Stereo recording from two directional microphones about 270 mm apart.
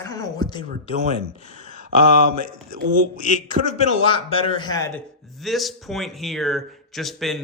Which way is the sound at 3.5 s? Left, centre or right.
Left.